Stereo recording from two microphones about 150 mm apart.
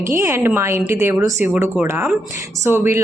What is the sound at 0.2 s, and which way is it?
A woman's voice, 15° right (ahead or behind).